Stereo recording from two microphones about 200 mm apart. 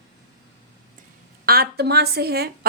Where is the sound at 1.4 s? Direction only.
50° right (ahead or behind).